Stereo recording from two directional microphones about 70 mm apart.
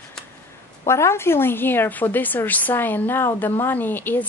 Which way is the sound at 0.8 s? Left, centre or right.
Left.